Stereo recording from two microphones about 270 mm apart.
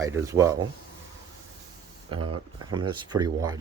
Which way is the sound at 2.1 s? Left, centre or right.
Centre.